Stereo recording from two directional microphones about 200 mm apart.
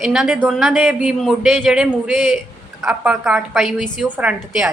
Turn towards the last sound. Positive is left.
turn(degrees=-5)  # may be behind; listen again after turning